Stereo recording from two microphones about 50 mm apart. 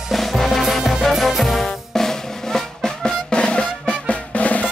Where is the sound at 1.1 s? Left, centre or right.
Centre; by 4.6 s left.